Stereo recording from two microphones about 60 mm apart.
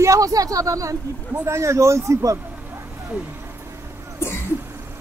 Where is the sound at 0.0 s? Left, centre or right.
Right.